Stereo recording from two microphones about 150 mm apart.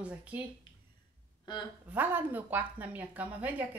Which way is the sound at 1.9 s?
10° right (ahead or behind).